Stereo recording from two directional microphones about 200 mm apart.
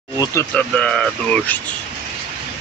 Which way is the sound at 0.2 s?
15° left (ahead or behind).